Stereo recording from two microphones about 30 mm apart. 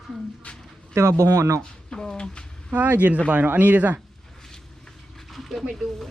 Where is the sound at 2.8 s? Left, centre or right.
Right.